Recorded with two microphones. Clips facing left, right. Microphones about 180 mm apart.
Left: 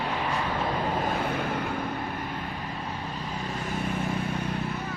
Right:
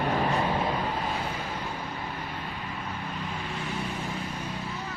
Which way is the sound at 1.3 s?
60° left (ahead or behind).